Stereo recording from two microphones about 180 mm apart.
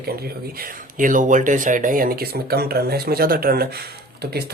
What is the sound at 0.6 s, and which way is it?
Speech, 50° right (ahead or behind).